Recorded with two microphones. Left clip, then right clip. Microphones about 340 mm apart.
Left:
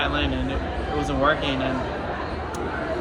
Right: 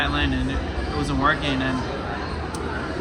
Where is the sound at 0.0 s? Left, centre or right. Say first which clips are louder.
Right 1 dB; centre.